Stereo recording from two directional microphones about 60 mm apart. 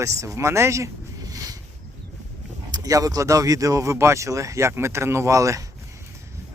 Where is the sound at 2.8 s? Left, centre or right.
Right.